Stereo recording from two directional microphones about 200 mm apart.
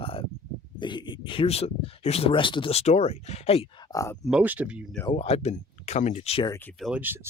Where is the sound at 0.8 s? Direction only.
25° left (ahead or behind).